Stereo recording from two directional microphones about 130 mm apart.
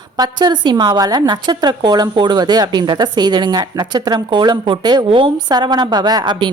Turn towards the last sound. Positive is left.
turn(degrees=-35)  # may be behind; listen again after turning